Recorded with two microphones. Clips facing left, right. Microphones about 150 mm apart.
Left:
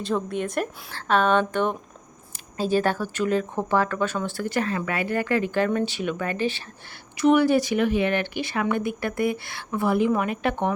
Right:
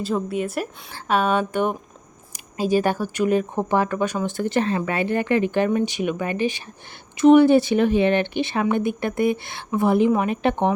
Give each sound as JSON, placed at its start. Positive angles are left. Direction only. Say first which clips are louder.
{"t": 0.0, "sound": "a woman's voice", "louder": "right 2 dB", "side_deg": -5}